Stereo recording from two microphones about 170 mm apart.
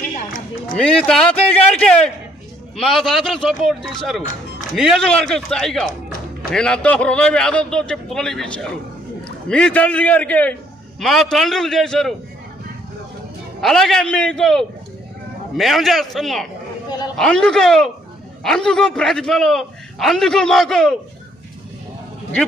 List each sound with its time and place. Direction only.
0.1 s run: 55° left (ahead or behind)
0.7 s a sound: 5° left (ahead or behind)
2.8 s a man's voice: centre (ahead or behind)
13.6 s a man's voice: centre (ahead or behind)